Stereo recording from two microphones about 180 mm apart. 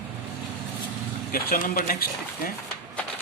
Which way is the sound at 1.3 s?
55° left (ahead or behind).